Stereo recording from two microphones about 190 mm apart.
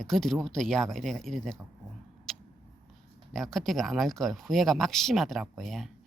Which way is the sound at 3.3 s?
Centre (ahead or behind).